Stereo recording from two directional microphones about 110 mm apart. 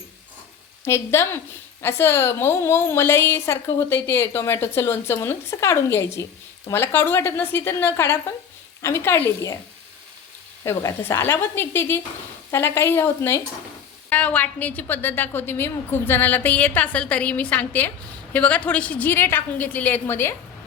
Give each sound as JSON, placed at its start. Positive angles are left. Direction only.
{"t": 0.9, "sound": "a woman's voice", "side_deg": 25}
{"t": 10.6, "sound": "a woman's voice", "side_deg": 30}